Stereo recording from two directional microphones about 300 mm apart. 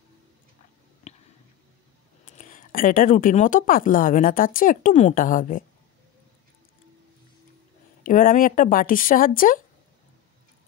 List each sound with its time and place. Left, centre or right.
1.1 s a sound: left
2.2 s speech: left
8.0 s speech: left